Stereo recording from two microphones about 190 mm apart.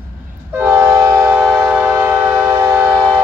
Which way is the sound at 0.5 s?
10° right (ahead or behind).